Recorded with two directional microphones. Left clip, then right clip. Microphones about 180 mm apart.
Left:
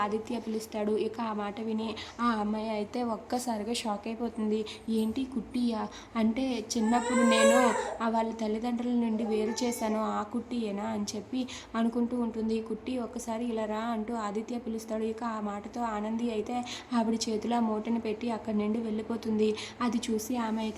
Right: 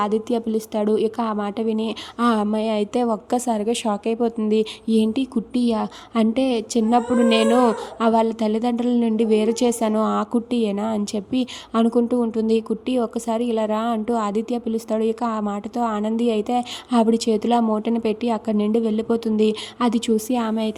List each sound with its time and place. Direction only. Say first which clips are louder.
0.0 s a woman's voice: right 10 dB; 45° right (ahead or behind)